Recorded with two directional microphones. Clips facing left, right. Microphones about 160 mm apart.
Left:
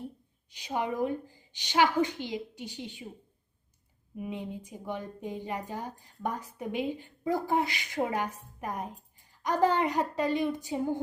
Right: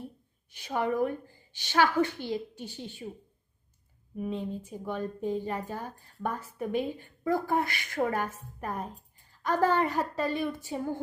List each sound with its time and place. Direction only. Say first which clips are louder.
0.5 s a woman's voice: right 3 dB; 15° left (ahead or behind)
4.2 s a woman's voice: right 3 dB; 15° left (ahead or behind)